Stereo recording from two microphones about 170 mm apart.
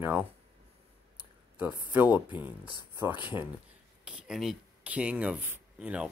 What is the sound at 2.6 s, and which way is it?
Speech, 25° left (ahead or behind).